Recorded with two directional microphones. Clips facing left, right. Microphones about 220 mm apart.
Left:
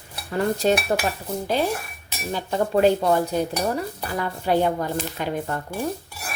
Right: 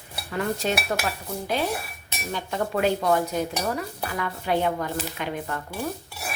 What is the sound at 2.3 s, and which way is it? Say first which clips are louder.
Stir: left 5 dB; 35° left (ahead or behind).